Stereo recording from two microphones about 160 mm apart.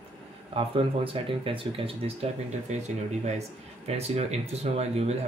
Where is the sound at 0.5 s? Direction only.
35° right (ahead or behind).